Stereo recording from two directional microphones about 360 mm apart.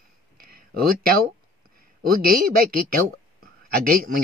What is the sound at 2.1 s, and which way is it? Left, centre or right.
Speech, right.